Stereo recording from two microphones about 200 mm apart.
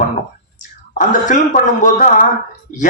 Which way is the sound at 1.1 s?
40° left (ahead or behind).